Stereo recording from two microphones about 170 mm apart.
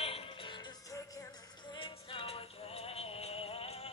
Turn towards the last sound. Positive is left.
turn(degrees=35)  # may be behind; listen again after turning